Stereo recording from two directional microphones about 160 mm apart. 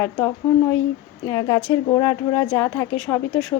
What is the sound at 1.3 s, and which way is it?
Speech, 25° left (ahead or behind).